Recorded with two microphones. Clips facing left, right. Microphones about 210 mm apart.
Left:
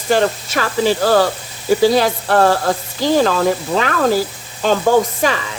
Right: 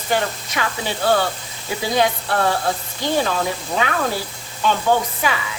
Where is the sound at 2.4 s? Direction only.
90° left.